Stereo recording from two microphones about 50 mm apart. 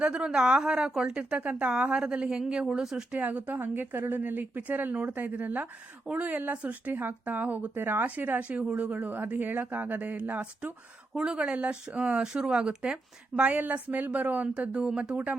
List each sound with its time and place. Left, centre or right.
0.0 s speech: right
3.1 s a woman's voice: right
6.9 s a woman's voice: right
7.7 s a woman's voice: right
8.4 s speech: right
8.9 s a woman's voice: right
14.6 s speech: right